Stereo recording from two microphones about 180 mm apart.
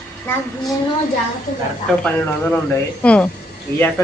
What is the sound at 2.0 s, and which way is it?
A woman's voice, 10° left (ahead or behind).